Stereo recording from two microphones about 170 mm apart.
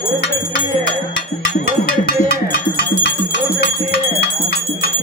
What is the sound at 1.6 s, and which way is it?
Livestock, 60° left (ahead or behind).